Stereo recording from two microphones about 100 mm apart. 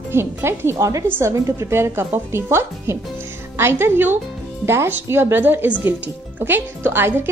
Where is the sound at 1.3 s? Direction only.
35° right (ahead or behind).